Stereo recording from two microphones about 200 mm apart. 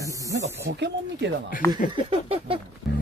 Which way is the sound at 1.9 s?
25° right (ahead or behind).